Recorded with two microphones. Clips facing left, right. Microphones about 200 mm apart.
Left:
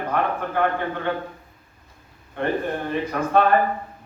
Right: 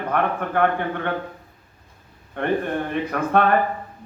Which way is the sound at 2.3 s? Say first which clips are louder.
Right 2 dB; 55° right (ahead or behind).